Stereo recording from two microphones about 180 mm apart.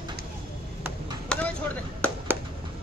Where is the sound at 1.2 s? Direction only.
10° left (ahead or behind).